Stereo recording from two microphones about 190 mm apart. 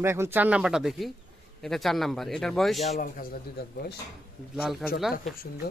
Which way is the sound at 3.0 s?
50° left (ahead or behind).